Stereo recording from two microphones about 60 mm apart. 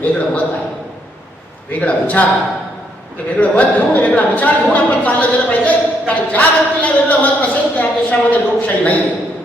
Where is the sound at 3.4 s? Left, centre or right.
Left.